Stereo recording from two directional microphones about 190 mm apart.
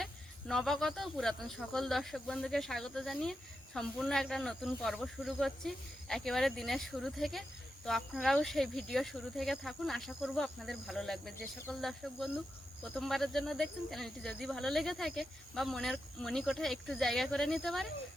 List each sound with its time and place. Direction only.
0.0 s speech: centre (ahead or behind)